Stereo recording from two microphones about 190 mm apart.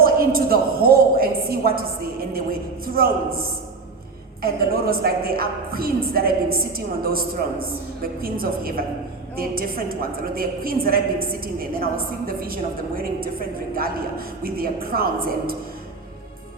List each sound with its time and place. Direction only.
0.0 s a woman's voice: 50° right (ahead or behind)
4.4 s a woman's voice: 55° right (ahead or behind)
14.4 s a woman's voice: 50° right (ahead or behind)